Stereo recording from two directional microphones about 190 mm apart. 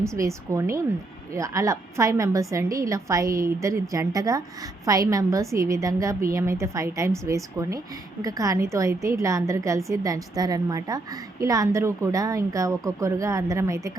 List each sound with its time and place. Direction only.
0.0 s speech: 15° right (ahead or behind)